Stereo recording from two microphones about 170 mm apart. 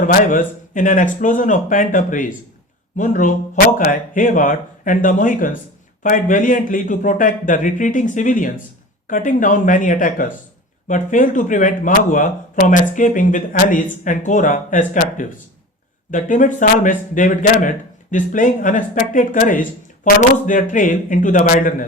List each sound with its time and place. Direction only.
0.0 s speech: 50° left (ahead or behind)